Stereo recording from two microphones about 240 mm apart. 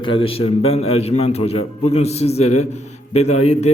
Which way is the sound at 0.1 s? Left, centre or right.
Left.